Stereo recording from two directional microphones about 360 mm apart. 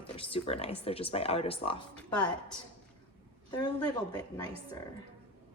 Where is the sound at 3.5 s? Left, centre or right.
Centre.